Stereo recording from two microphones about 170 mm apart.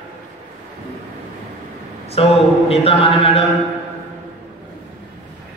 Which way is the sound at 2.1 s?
35° left (ahead or behind).